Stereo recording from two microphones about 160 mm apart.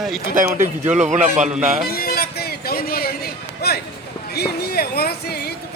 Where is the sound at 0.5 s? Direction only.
50° right (ahead or behind).